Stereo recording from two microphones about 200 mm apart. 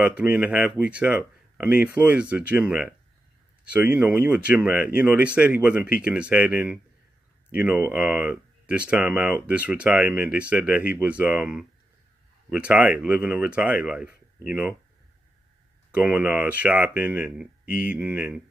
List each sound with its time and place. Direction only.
0.0 s speech: 10° right (ahead or behind)
15.9 s speech: 5° right (ahead or behind)